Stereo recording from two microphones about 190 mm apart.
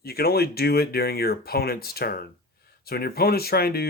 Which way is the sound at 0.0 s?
55° left (ahead or behind).